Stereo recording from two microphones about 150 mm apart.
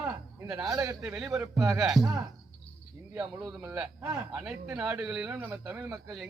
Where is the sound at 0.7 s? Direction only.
20° right (ahead or behind).